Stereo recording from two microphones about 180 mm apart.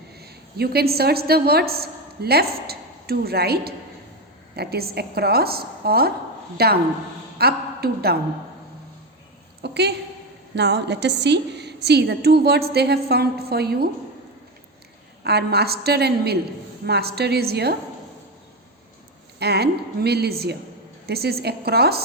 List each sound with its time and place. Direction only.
0.2 s a woman's voice: 60° right (ahead or behind)
9.6 s a sound: 65° right (ahead or behind)
10.5 s a woman's voice: 70° right (ahead or behind)
15.2 s a woman's voice: 65° right (ahead or behind)
19.4 s a woman's voice: 65° right (ahead or behind)